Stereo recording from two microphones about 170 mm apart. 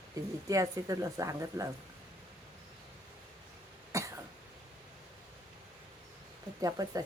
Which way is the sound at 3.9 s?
20° right (ahead or behind).